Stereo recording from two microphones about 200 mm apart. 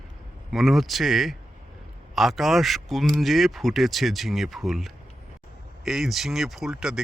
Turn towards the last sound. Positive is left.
turn(degrees=0)  # may be behind; listen again after turning